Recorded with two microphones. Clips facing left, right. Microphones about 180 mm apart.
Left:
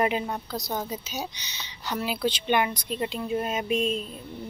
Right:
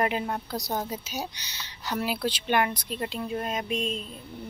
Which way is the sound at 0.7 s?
10° right (ahead or behind).